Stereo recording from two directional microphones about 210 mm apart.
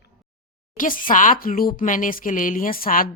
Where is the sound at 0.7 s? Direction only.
40° left (ahead or behind).